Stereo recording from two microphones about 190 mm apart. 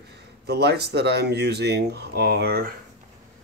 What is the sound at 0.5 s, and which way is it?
A man's voice, 60° right (ahead or behind).